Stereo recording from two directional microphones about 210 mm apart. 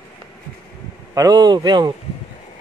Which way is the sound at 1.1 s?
20° right (ahead or behind).